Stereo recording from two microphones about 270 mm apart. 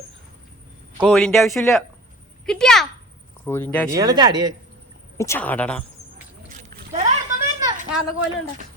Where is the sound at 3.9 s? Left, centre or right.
Centre.